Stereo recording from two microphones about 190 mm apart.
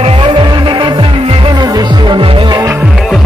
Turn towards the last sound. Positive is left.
turn(degrees=0)  # may be behind; listen again after turning